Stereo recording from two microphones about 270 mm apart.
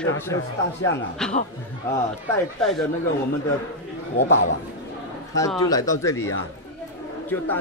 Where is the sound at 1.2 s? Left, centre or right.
Centre.